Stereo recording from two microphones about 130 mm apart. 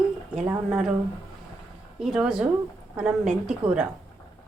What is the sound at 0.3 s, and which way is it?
Speech, 5° right (ahead or behind).